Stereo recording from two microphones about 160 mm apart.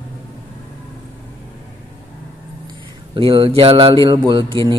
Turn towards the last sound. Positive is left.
turn(degrees=-30)  # may be behind; listen again after turning